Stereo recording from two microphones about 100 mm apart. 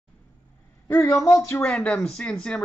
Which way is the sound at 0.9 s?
35° left (ahead or behind).